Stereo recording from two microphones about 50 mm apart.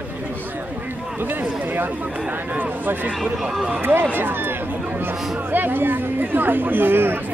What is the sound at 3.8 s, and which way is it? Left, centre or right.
Speech, right.